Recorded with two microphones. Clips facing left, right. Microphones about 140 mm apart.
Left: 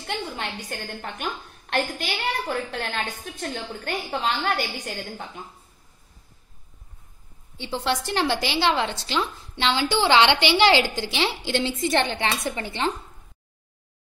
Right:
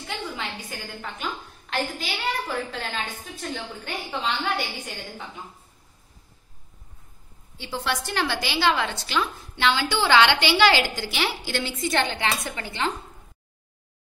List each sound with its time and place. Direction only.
0.0 s a woman's voice: 60° left (ahead or behind)
7.5 s a woman's voice: 25° left (ahead or behind)